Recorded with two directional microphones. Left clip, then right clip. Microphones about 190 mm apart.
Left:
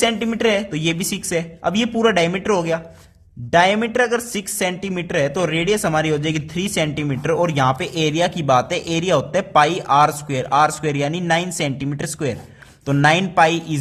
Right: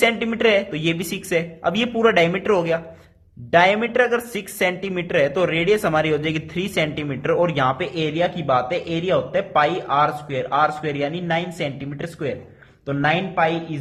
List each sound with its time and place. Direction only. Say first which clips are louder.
0.0 s speech: even; 30° left (ahead or behind); by 13.6 s 45° left (ahead or behind)